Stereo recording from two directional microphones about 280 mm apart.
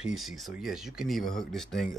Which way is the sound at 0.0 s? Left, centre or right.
Centre.